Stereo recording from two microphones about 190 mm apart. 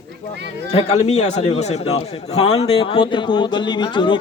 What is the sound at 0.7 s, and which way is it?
A man's voice, 35° left (ahead or behind).